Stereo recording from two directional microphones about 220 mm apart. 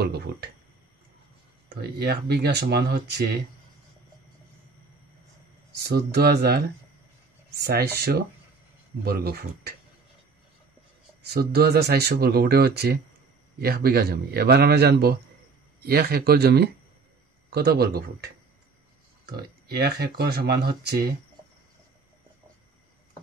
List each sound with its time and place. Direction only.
0.0 s speech: 50° right (ahead or behind)
1.7 s speech: 45° right (ahead or behind)
5.9 s speech: 45° right (ahead or behind)
9.0 s speech: 45° right (ahead or behind)
11.2 s speech: 45° right (ahead or behind)